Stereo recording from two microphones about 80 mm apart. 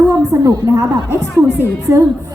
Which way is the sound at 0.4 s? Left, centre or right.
Right.